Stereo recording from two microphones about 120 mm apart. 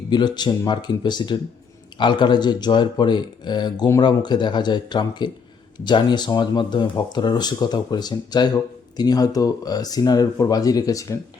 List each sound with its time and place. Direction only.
0.1 s speech: 35° left (ahead or behind)